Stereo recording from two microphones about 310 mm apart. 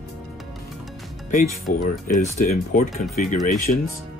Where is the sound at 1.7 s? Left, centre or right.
Left.